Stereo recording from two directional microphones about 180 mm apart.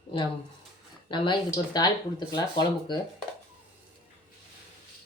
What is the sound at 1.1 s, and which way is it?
Speech, 25° left (ahead or behind).